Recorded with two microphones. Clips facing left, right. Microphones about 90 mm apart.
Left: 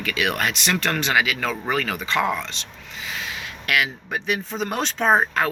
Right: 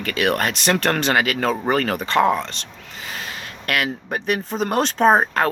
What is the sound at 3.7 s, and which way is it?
Speech, 45° right (ahead or behind).